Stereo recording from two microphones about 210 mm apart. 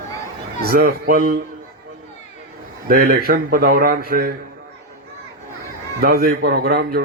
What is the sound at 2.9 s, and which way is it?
Speech, 45° right (ahead or behind).